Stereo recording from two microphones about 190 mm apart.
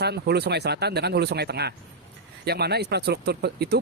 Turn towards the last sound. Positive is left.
turn(degrees=-60)  # may be behind; listen again after turning